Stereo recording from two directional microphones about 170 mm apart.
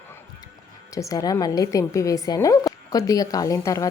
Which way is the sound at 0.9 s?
20° left (ahead or behind).